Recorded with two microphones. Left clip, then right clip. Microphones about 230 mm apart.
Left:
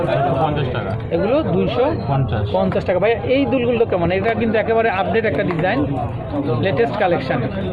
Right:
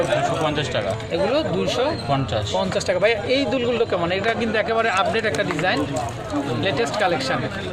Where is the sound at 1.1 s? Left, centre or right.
Centre.